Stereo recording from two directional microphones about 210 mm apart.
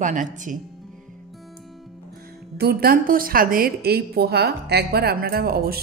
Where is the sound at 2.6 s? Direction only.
45° right (ahead or behind).